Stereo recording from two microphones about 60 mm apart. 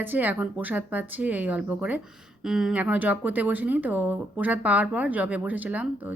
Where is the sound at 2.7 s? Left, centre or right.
Right.